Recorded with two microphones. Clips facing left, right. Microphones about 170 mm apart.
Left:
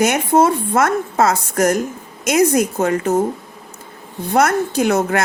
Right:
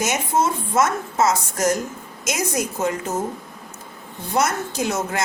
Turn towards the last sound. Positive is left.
turn(degrees=60)  # may be behind; listen again after turning